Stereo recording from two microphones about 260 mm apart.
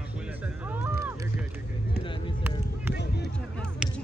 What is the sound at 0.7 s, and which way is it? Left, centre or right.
Music, centre.